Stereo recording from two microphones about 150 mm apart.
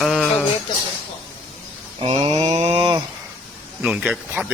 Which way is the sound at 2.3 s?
45° right (ahead or behind).